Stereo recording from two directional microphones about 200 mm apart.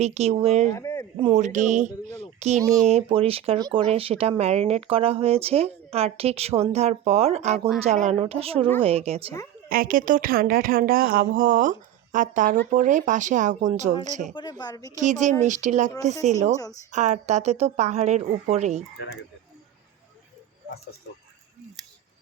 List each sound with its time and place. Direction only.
0.0 s speech: 30° right (ahead or behind)
0.7 s a sound: 15° left (ahead or behind)
1.1 s speech: 30° right (ahead or behind)
2.6 s speech: 15° right (ahead or behind)
2.8 s a woman's voice: 30° right (ahead or behind)
9.6 s a woman's voice: 45° right (ahead or behind)
14.6 s a woman's voice: 20° left (ahead or behind)
14.9 s speech: 35° right (ahead or behind)